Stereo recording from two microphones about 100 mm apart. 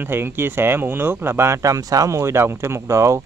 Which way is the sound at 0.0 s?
20° right (ahead or behind).